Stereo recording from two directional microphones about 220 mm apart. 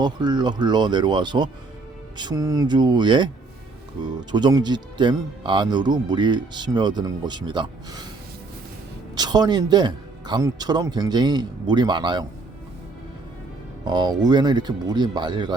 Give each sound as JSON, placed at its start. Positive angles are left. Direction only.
{"t": 0.0, "sound": "speech", "side_deg": -20}
{"t": 4.3, "sound": "speech", "side_deg": -20}
{"t": 9.1, "sound": "speech", "side_deg": -20}
{"t": 13.8, "sound": "speech", "side_deg": -20}